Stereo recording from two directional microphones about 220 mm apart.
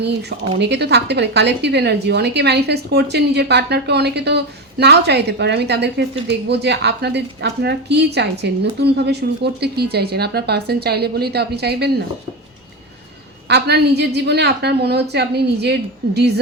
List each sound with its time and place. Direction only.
0.0 s a woman's voice: 50° right (ahead or behind)
13.5 s a woman's voice: 50° right (ahead or behind)